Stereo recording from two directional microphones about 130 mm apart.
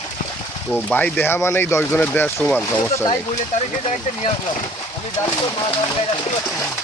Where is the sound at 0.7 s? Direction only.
10° left (ahead or behind).